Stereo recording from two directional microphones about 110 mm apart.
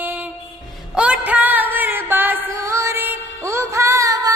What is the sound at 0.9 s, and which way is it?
Music, 10° right (ahead or behind).